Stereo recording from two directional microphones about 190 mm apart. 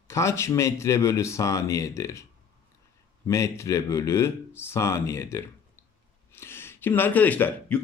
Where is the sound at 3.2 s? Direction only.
15° left (ahead or behind).